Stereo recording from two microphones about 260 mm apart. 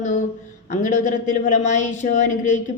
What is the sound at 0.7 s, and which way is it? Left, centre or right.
Speech, left.